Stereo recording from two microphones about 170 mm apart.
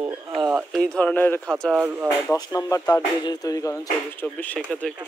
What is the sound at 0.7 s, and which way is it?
Speech, 5° left (ahead or behind).